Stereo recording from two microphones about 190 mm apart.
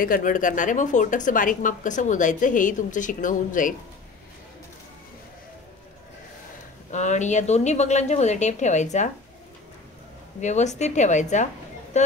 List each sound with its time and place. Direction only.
0.0 s speech: 45° left (ahead or behind)
6.9 s a woman's voice: 40° left (ahead or behind)
10.4 s a woman's voice: 40° left (ahead or behind)